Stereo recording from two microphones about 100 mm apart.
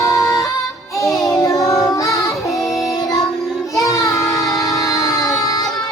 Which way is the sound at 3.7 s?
35° left (ahead or behind).